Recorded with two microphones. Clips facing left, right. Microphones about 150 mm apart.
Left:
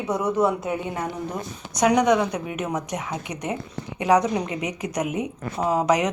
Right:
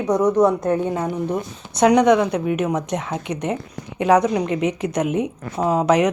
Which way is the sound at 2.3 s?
20° left (ahead or behind).